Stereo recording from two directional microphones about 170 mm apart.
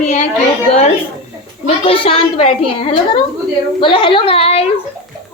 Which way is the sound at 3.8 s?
30° left (ahead or behind).